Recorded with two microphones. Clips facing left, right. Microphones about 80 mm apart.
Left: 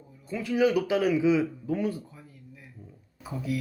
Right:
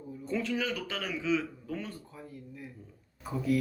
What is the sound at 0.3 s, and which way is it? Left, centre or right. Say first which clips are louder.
A man's voice: left 7 dB; centre.